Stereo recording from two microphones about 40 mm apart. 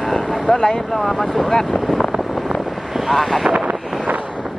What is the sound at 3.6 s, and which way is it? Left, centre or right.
Wind noise, right.